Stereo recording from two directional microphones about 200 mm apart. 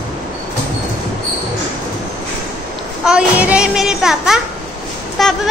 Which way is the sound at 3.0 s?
5° right (ahead or behind).